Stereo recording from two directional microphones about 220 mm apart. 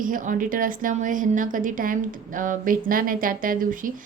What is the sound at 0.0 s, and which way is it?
A woman's voice, 35° right (ahead or behind).